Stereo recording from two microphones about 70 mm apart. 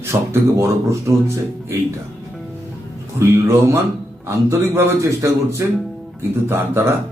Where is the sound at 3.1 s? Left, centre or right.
Right.